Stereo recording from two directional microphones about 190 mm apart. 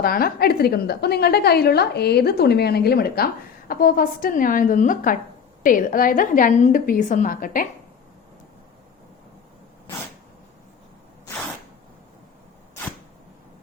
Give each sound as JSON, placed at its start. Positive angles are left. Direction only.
{"t": 0.0, "sound": "a woman's voice", "side_deg": 50}